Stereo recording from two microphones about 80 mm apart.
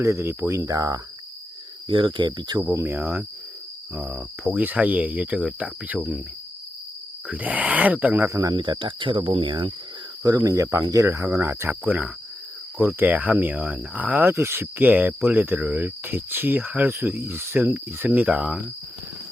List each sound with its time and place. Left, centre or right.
0.0 s speech: right
1.9 s cricket: right
2.8 s speech: right
7.3 s speech: centre
8.3 s speech: right
8.5 s cricket: right
10.2 s speech: right
10.8 s cricket: right
13.0 s speech: right